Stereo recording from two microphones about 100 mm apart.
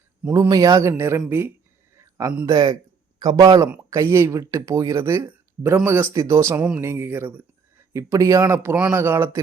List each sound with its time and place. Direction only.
0.3 s speech: 40° right (ahead or behind); by 1.5 s 20° right (ahead or behind)
2.0 s a sound: 30° right (ahead or behind)
2.5 s a man's voice: 45° right (ahead or behind); by 6.6 s 30° right (ahead or behind)
6.6 s speech: 15° right (ahead or behind)
6.8 s speech: 25° right (ahead or behind)
7.9 s speech: 30° right (ahead or behind)